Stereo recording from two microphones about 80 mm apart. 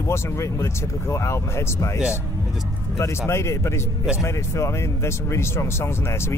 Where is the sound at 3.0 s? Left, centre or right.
Left.